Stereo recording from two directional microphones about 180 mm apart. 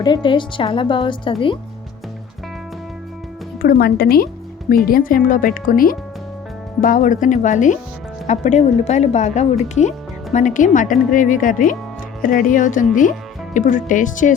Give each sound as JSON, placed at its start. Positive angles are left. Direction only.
{"t": 0.0, "sound": "a woman's voice", "side_deg": 25}
{"t": 3.6, "sound": "speech", "side_deg": 55}